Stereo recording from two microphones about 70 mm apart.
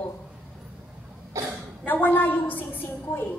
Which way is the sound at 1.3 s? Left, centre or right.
Right.